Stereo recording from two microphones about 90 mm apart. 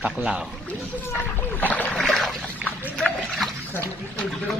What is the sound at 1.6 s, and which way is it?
Boat, 20° left (ahead or behind).